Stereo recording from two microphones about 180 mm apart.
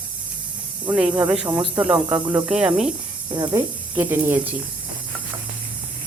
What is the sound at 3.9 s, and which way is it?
Speech, 10° right (ahead or behind).